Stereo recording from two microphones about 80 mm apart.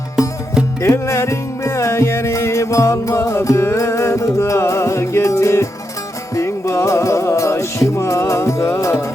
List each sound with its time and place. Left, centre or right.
0.8 s music: left